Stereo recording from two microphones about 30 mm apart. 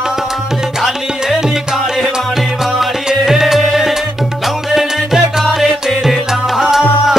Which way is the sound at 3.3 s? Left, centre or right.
Centre.